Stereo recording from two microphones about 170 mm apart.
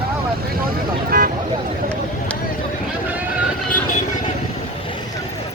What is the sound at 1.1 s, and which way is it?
Speech, 60° right (ahead or behind).